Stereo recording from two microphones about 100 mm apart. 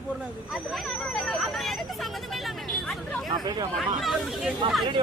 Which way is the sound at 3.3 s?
45° right (ahead or behind).